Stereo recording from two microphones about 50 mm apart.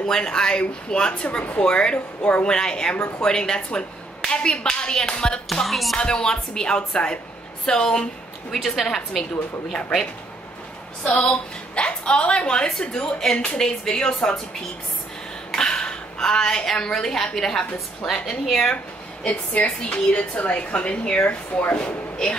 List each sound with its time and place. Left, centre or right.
0.0 s speech: centre
5.5 s music: centre
5.9 s speech: centre
8.5 s speech: centre
11.1 s a woman's voice: left
15.5 s a woman's voice: centre
17.7 s a woman's voice: centre
19.2 s a woman's voice: left